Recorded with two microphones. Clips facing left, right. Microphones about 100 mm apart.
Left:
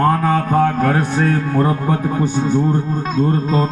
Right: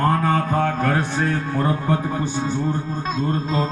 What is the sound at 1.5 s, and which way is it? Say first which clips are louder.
Speech: left 4 dB; 25° left (ahead or behind).